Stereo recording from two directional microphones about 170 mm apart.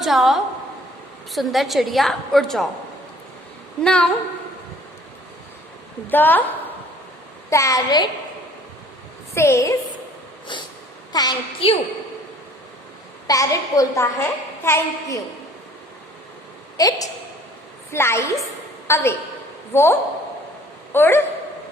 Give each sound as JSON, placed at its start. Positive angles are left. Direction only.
{"t": 0.0, "sound": "a woman's voice", "side_deg": 0}
{"t": 3.8, "sound": "a woman's voice", "side_deg": 5}
{"t": 6.1, "sound": "a woman's voice", "side_deg": 10}
{"t": 7.5, "sound": "a woman's voice", "side_deg": 20}
{"t": 9.3, "sound": "a woman's voice", "side_deg": 15}
{"t": 10.5, "sound": "a sound", "side_deg": 30}
{"t": 11.1, "sound": "a child's voice", "side_deg": 25}
{"t": 11.6, "sound": "a woman's voice", "side_deg": 35}
{"t": 13.2, "sound": "a woman's voice", "side_deg": 20}
{"t": 16.7, "sound": "a woman's voice", "side_deg": 20}